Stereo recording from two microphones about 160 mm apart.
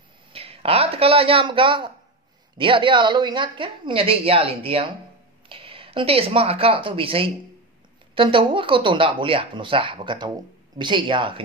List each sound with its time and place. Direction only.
0.3 s a woman's voice: 35° right (ahead or behind)